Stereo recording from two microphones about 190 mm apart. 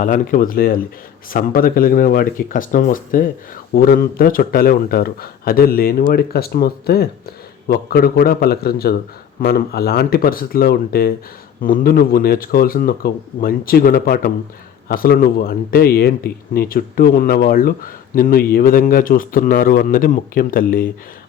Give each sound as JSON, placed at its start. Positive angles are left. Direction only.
{"t": 0.0, "sound": "speech", "side_deg": 45}